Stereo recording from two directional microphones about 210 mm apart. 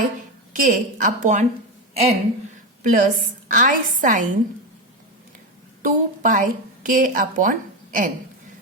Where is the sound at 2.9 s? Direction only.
40° right (ahead or behind).